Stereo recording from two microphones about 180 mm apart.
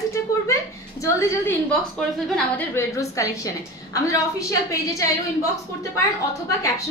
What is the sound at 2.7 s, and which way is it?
A woman's voice, 15° left (ahead or behind).